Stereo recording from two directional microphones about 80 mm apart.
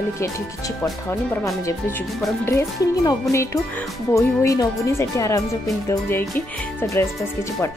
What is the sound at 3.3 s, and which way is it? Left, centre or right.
Speech, left.